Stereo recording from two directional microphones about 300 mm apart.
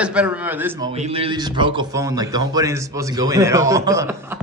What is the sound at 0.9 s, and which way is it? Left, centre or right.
A man's voice, centre.